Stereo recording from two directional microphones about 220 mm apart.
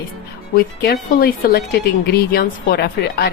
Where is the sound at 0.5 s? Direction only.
45° left (ahead or behind).